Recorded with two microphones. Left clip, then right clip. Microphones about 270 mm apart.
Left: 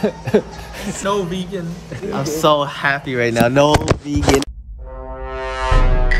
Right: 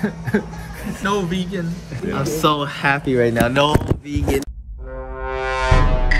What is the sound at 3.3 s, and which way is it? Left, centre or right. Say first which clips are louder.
Speech: left 3 dB; left.